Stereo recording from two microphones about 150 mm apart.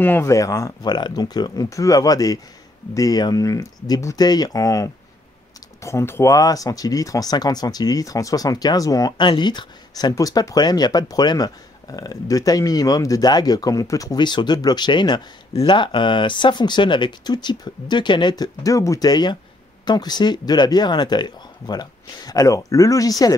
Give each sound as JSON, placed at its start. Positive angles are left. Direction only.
{"t": 0.0, "sound": "speech", "side_deg": 15}